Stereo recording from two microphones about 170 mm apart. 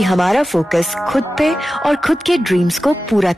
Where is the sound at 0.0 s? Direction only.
Centre (ahead or behind).